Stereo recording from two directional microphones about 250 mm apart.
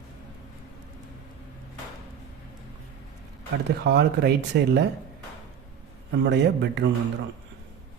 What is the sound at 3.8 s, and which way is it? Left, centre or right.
Speech, right.